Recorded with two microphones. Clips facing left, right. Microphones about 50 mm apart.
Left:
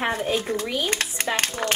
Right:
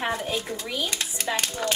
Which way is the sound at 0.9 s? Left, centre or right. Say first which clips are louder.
Left 5 dB; left.